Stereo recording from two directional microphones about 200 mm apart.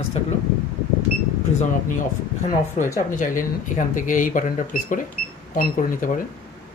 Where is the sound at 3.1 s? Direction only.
40° left (ahead or behind).